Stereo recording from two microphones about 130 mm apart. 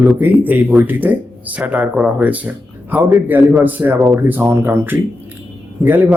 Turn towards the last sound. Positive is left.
turn(degrees=-15)  # may be behind; listen again after turning